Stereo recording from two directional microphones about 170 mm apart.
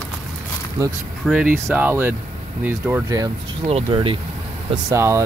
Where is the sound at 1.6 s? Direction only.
15° right (ahead or behind).